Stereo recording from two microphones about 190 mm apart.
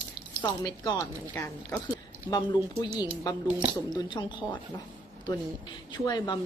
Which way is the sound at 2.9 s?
20° left (ahead or behind).